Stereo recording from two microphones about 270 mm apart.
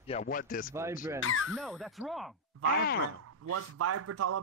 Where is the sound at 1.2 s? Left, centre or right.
Left.